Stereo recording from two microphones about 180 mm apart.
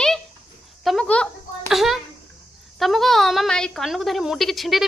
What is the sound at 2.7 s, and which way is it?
A woman's voice, centre (ahead or behind).